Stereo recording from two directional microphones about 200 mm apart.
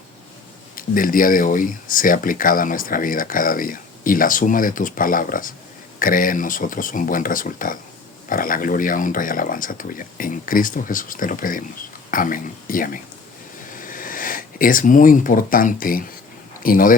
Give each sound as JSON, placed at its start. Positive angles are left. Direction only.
{"t": 0.8, "sound": "speech", "side_deg": 45}